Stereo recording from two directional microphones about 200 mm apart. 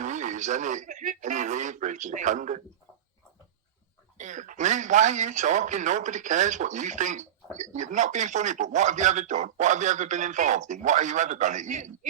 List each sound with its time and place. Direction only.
0.0 s speech: 35° right (ahead or behind)
4.2 s speech: 40° right (ahead or behind)